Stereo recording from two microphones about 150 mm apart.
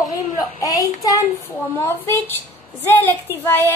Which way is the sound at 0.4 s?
20° left (ahead or behind).